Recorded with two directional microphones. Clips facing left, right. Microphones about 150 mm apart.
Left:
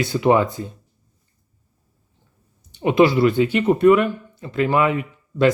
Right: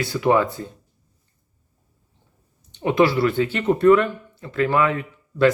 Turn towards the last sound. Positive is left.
turn(degrees=15)  # may be behind; listen again after turning